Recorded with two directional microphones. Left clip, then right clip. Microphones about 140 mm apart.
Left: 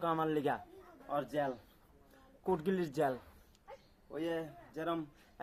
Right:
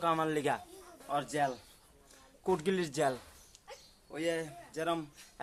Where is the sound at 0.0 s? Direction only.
25° right (ahead or behind).